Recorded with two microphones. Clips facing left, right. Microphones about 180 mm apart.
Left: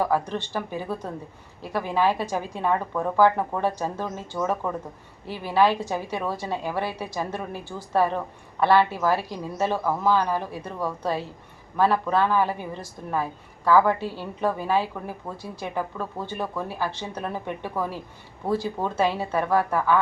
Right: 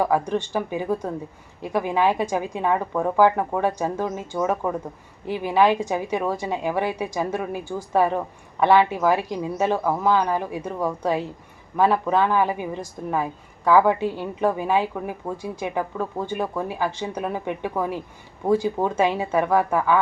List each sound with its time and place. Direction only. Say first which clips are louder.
0.0 s a woman's voice: right 3 dB; 15° right (ahead or behind)